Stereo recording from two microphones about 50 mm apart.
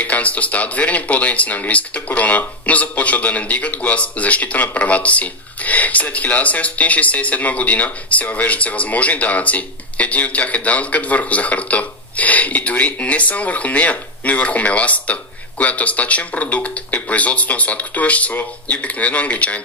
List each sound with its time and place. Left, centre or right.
0.0 s speech: left